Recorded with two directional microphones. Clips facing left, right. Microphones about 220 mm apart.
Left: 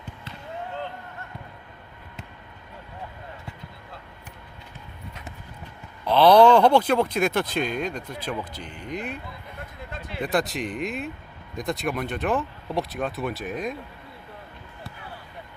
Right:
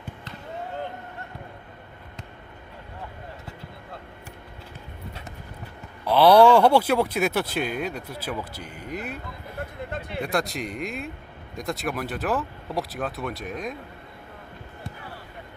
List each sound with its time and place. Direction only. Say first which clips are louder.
6.1 s speech: even; 10° right (ahead or behind)
9.9 s speech: right 4 dB; 60° right (ahead or behind)
10.2 s speech: left 2 dB; centre (ahead or behind)